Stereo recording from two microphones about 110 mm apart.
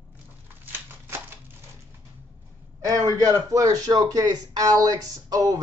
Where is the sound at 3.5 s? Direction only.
35° right (ahead or behind).